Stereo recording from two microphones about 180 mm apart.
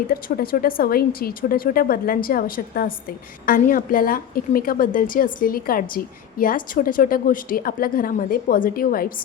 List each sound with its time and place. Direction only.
0.1 s a woman's voice: 55° left (ahead or behind)